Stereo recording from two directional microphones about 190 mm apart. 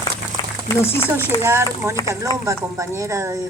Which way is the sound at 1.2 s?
15° right (ahead or behind).